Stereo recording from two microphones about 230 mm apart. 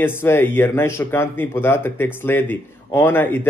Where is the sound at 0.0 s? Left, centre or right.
Centre.